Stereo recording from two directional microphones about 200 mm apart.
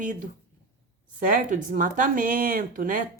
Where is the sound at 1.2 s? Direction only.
40° right (ahead or behind).